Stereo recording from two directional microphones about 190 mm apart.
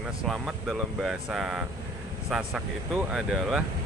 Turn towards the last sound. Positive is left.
turn(degrees=-5)  # may be behind; listen again after turning